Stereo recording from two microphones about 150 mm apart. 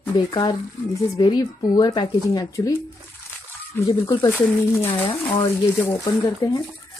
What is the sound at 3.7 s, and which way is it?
Speech, 20° left (ahead or behind).